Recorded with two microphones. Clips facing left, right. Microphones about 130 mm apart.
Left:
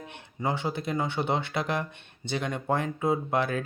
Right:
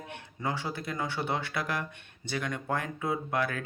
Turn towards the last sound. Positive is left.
turn(degrees=25)  # may be behind; listen again after turning